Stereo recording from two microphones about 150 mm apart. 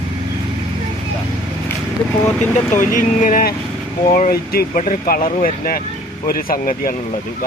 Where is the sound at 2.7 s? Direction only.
60° left (ahead or behind).